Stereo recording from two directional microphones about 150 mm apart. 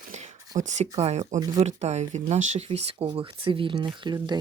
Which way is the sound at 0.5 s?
50° right (ahead or behind).